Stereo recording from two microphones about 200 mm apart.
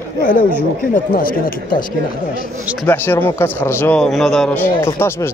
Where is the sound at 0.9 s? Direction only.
45° left (ahead or behind).